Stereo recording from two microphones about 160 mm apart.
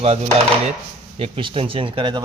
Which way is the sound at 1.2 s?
30° right (ahead or behind).